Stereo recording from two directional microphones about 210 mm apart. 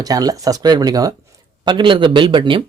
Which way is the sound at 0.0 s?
15° right (ahead or behind).